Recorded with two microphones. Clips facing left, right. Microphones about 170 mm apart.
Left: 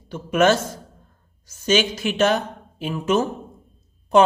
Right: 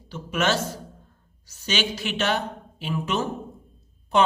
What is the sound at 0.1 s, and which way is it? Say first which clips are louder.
A man's voice: left 7 dB; 50° left (ahead or behind).